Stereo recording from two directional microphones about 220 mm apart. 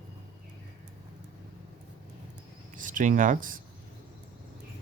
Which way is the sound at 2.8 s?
35° right (ahead or behind).